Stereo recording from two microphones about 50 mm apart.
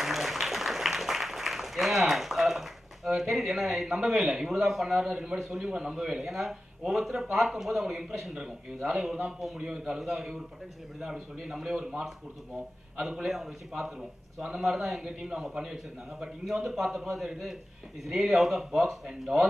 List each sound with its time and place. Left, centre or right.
0.0 s a sound: centre
3.1 s speech: centre
5.1 s speech: centre
6.2 s speech: centre
9.6 s speech: centre
12.9 s speech: centre